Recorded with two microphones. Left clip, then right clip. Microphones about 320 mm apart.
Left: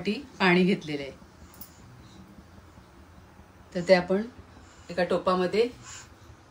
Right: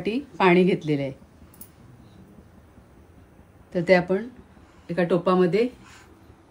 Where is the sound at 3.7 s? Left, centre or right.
Right.